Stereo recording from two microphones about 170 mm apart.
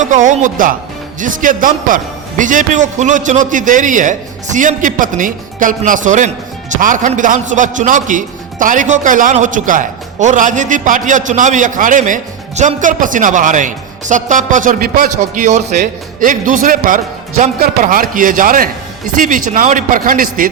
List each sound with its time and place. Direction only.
0.0 s a man's voice: 50° right (ahead or behind)